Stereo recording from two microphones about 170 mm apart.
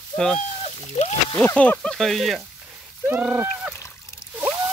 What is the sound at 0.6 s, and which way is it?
Splash, 40° left (ahead or behind).